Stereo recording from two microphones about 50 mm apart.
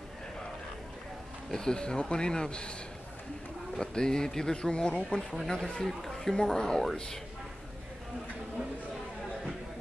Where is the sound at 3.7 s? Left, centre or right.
Centre.